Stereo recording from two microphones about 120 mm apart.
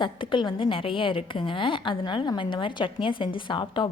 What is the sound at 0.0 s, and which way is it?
A woman's voice, 40° left (ahead or behind).